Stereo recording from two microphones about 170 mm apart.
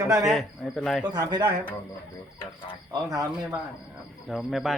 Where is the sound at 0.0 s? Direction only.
20° right (ahead or behind).